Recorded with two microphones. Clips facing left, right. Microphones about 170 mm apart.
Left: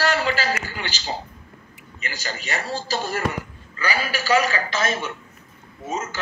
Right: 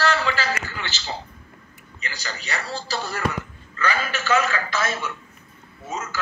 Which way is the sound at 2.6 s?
45° left (ahead or behind).